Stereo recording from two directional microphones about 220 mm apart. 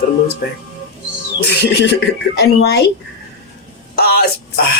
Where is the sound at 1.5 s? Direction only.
50° left (ahead or behind).